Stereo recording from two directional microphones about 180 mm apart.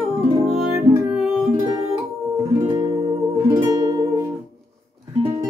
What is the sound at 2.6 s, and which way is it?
Music, 25° right (ahead or behind).